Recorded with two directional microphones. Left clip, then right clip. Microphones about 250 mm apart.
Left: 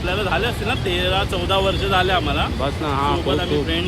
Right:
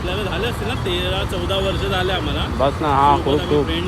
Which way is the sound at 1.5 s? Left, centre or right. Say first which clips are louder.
Left 3 dB; left.